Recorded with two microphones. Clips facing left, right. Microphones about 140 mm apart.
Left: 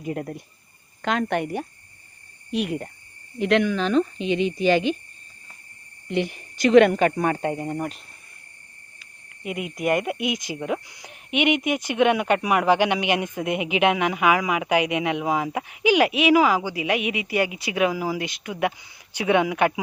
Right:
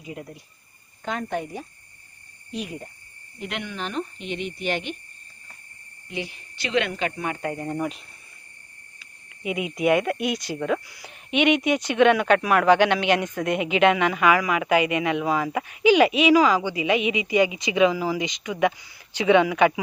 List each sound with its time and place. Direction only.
0.0 s speech: 55° left (ahead or behind)
1.0 s a woman's voice: 85° left; by 2.9 s 65° left (ahead or behind)
3.3 s speech: 90° left
6.1 s speech: 55° left (ahead or behind)
7.5 s speech: 10° left (ahead or behind)
9.4 s speech: centre (ahead or behind)
10.1 s speech: 15° left (ahead or behind)